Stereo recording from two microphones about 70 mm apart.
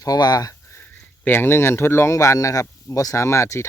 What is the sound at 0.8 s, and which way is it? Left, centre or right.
Speech, left.